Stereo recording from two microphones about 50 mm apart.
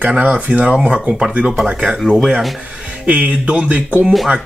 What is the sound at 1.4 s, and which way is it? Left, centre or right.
Speech, centre.